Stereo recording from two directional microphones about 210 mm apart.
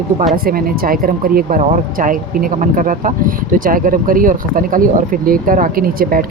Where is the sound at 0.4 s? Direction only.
45° right (ahead or behind).